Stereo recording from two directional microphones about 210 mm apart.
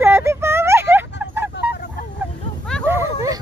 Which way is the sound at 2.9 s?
15° right (ahead or behind).